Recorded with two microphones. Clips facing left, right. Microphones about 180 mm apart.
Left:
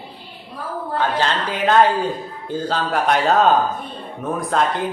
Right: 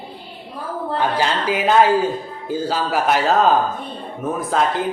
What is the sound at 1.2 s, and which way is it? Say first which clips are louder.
A man's voice: right 1 dB; 10° right (ahead or behind).